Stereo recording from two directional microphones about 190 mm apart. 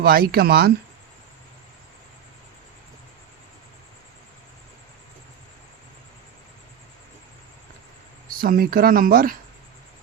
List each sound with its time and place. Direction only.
0.0 s speech: 50° right (ahead or behind)
8.3 s speech: 50° right (ahead or behind)